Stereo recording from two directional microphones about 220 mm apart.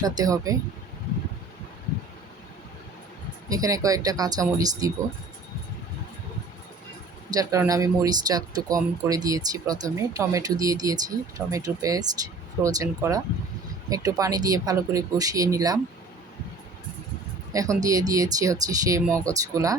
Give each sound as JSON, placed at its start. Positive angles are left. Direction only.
{"t": 0.0, "sound": "speech", "side_deg": -15}
{"t": 3.5, "sound": "speech", "side_deg": -15}
{"t": 7.3, "sound": "speech", "side_deg": -15}
{"t": 17.5, "sound": "speech", "side_deg": -15}